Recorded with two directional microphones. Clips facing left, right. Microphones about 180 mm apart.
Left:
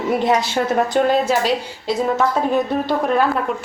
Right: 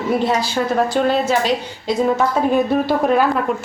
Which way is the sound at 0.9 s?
10° left (ahead or behind).